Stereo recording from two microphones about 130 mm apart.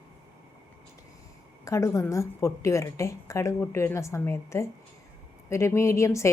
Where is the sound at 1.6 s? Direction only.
25° left (ahead or behind).